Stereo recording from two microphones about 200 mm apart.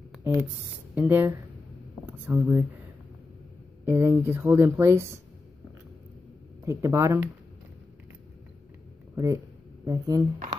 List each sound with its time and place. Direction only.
0.2 s speech: 10° right (ahead or behind)
3.8 s speech: 10° right (ahead or behind)
6.6 s speech: 15° right (ahead or behind)
9.1 s speech: 15° right (ahead or behind)